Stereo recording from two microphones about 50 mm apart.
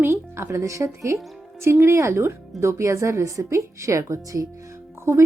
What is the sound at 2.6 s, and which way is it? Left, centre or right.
A woman's voice, right.